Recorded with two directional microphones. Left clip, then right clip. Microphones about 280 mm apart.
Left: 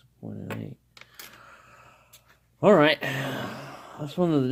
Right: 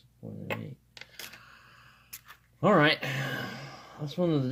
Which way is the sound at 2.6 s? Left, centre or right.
Left.